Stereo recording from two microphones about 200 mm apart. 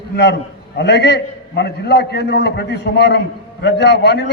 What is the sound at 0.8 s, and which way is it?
A man's voice, 55° left (ahead or behind).